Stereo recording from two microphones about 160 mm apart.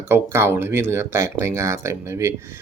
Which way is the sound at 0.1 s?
15° right (ahead or behind).